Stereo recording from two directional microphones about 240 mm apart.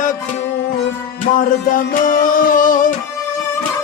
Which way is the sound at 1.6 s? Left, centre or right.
Left.